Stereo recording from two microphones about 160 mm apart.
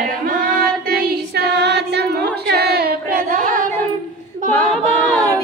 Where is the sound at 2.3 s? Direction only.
90° right; by 3.7 s 60° right (ahead or behind).